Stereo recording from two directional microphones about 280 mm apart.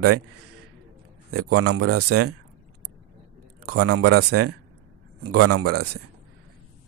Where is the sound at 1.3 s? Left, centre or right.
Right.